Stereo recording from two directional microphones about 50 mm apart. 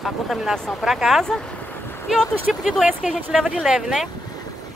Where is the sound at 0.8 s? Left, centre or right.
Centre.